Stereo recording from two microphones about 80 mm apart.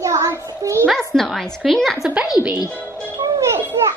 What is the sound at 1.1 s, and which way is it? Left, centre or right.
Speech, centre.